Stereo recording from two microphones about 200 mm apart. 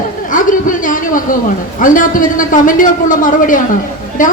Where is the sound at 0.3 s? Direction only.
40° left (ahead or behind).